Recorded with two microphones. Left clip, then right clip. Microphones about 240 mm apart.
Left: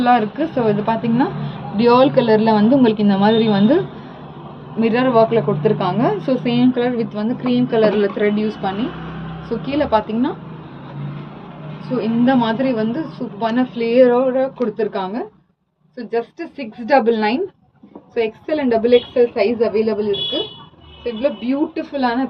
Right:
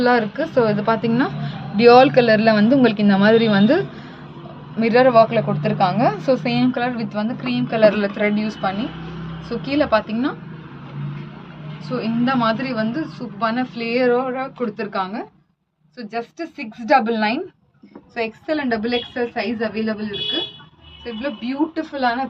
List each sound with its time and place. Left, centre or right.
0.0 s a woman's voice: right
4.8 s a woman's voice: right
12.0 s a woman's voice: right